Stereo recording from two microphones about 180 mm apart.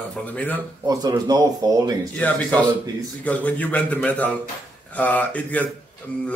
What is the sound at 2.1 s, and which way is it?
A man's voice, 10° left (ahead or behind).